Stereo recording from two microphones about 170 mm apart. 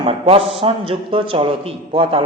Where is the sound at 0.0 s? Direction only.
35° right (ahead or behind).